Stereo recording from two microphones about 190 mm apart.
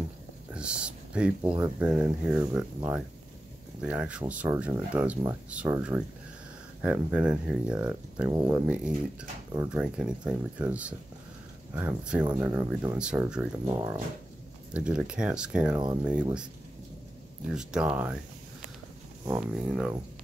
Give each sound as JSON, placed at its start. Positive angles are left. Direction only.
{"t": 0.6, "sound": "speech", "side_deg": -5}
{"t": 8.3, "sound": "speech", "side_deg": -20}
{"t": 8.6, "sound": "speech", "side_deg": -5}
{"t": 17.5, "sound": "speech", "side_deg": -5}
{"t": 19.2, "sound": "speech", "side_deg": -10}